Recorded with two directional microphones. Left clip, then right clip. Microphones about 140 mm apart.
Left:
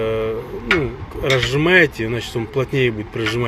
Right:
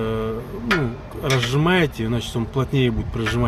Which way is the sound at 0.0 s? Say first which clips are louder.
Left 4 dB; 20° right (ahead or behind).